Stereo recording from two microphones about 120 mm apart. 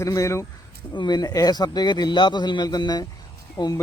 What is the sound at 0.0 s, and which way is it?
A man's voice, 25° left (ahead or behind).